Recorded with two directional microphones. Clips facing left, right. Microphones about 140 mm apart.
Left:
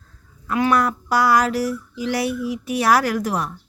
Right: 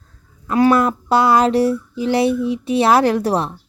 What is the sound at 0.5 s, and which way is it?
Speech, 35° right (ahead or behind).